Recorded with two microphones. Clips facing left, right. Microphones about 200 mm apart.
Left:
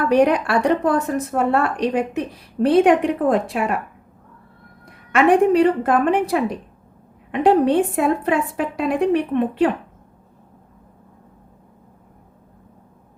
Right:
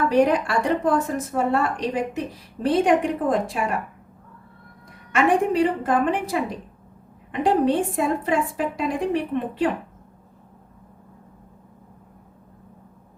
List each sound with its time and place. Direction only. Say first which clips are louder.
0.1 s a woman's voice: left 6 dB; 65° left (ahead or behind)
5.1 s a woman's voice: left 5 dB; 65° left (ahead or behind)